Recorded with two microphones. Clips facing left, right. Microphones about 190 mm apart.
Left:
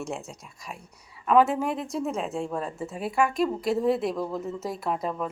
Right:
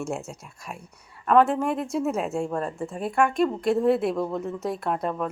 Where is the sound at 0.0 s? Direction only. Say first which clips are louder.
Right 3 dB; centre (ahead or behind).